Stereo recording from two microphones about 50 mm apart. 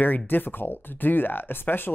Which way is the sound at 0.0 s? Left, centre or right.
Left.